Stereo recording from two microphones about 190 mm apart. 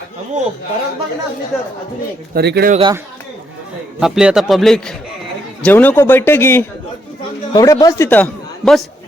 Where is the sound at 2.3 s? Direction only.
60° right (ahead or behind).